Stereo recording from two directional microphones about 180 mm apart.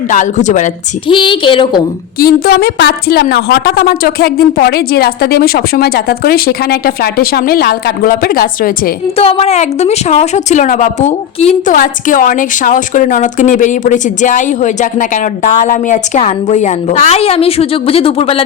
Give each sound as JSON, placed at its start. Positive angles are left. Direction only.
{"t": 0.1, "sound": "a woman's voice", "side_deg": 45}
{"t": 1.0, "sound": "a woman's voice", "side_deg": 30}
{"t": 2.1, "sound": "a woman's voice", "side_deg": 55}
{"t": 9.1, "sound": "a woman's voice", "side_deg": 35}